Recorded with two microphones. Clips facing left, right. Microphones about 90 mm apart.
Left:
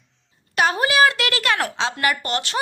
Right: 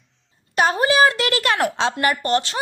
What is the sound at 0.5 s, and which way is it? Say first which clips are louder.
A woman's voice: right 2 dB; 35° right (ahead or behind).